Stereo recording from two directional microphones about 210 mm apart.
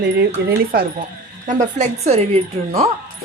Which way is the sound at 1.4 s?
35° right (ahead or behind).